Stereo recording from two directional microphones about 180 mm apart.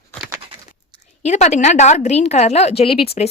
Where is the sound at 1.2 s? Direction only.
40° left (ahead or behind).